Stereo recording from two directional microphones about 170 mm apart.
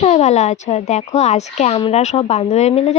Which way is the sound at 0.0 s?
40° left (ahead or behind).